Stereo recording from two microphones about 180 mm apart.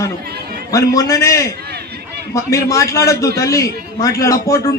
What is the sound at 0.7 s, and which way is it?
A man's voice, 20° left (ahead or behind).